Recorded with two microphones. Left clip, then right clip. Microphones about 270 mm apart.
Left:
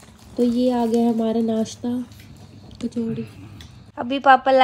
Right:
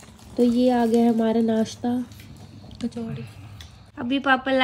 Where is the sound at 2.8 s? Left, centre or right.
Centre.